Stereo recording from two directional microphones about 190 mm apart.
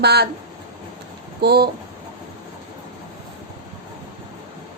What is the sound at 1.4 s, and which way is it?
Speech, 55° right (ahead or behind).